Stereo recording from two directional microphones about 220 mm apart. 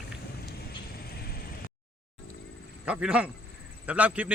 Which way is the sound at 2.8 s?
5° right (ahead or behind).